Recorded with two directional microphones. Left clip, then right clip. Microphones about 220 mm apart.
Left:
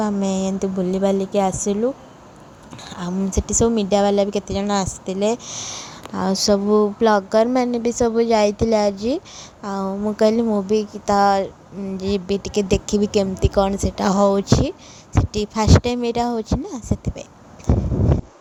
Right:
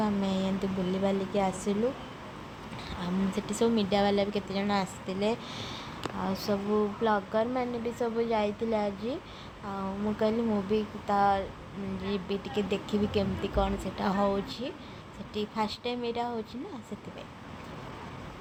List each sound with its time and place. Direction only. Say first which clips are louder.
0.0 s a woman's voice: left 8 dB; 45° left (ahead or behind)
2.9 s a woman's voice: left 9 dB; 40° left (ahead or behind)